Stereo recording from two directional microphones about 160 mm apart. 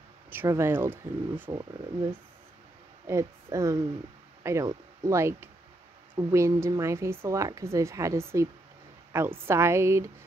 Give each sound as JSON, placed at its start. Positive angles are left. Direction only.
{"t": 0.3, "sound": "speech", "side_deg": -15}
{"t": 3.1, "sound": "speech", "side_deg": -15}